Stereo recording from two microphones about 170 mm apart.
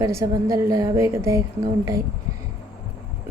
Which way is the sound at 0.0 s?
20° right (ahead or behind).